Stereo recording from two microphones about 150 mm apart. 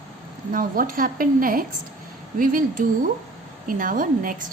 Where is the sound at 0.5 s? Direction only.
70° right (ahead or behind).